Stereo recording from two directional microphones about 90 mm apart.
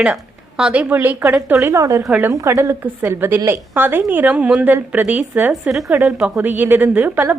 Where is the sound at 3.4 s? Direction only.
20° right (ahead or behind).